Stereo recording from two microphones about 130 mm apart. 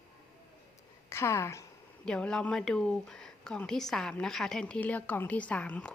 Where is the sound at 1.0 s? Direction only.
20° left (ahead or behind).